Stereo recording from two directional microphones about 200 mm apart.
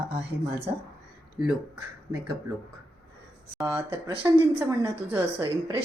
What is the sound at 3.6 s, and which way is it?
A woman's voice, 10° right (ahead or behind).